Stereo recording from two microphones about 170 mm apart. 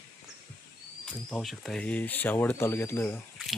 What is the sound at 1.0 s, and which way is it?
Speech, 5° left (ahead or behind).